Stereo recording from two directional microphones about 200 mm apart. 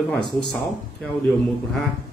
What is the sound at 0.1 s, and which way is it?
Speech, centre (ahead or behind).